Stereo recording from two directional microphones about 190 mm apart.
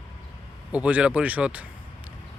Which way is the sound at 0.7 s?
5° right (ahead or behind).